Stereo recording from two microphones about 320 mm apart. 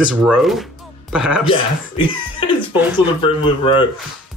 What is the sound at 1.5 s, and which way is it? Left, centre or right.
Speech, centre.